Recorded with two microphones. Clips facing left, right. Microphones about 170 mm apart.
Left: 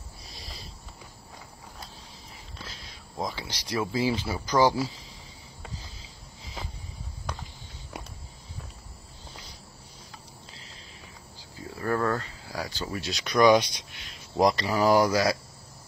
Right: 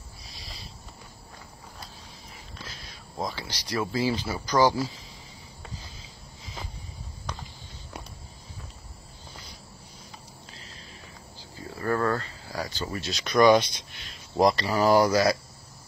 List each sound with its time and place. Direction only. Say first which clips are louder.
3.2 s speech: even; 15° left (ahead or behind)
11.8 s a sound: right 1 dB; centre (ahead or behind)
14.4 s speech: right 1 dB; 15° left (ahead or behind)